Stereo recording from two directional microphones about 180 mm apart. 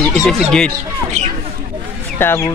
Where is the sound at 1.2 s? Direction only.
40° right (ahead or behind).